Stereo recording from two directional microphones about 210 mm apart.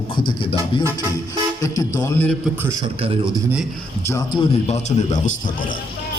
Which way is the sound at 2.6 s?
25° right (ahead or behind).